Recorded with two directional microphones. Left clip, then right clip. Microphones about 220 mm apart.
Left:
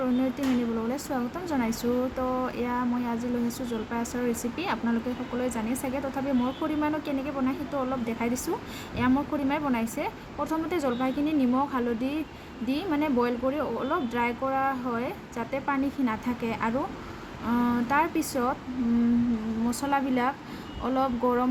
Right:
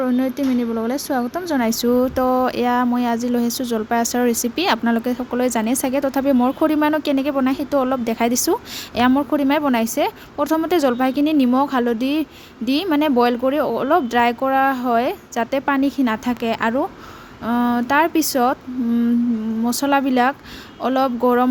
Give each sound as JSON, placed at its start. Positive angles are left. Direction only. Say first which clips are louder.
{"t": 0.0, "sound": "speech", "louder": "right 7 dB", "side_deg": -35}
{"t": 19.8, "sound": "speech", "louder": "right 10 dB", "side_deg": -40}